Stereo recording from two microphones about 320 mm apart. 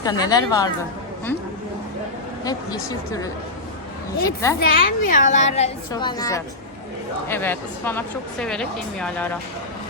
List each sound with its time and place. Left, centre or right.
0.0 s speech: centre
2.4 s speech: centre
4.6 s a woman's voice: left; by 9.4 s centre